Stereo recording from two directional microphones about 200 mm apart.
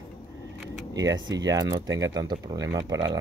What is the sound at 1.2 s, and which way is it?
Speech, 20° right (ahead or behind).